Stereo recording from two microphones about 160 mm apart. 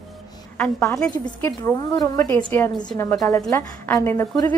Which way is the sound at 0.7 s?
20° left (ahead or behind).